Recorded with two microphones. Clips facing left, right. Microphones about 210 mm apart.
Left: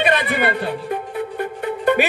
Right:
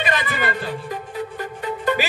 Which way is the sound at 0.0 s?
60° left (ahead or behind).